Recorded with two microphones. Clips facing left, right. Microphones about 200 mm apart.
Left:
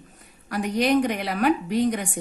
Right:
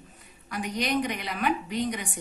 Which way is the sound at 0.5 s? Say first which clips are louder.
Left 7 dB; 55° left (ahead or behind).